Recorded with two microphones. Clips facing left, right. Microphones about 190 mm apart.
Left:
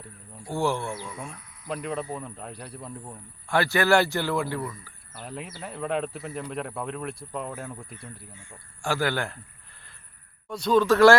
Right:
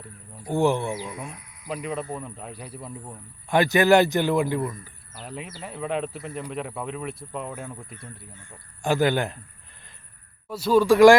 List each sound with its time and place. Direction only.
0.4 s speech: 20° right (ahead or behind)
3.5 s speech: 20° right (ahead or behind)
5.2 s speech: centre (ahead or behind)
8.8 s speech: 20° right (ahead or behind)
10.5 s speech: 5° right (ahead or behind)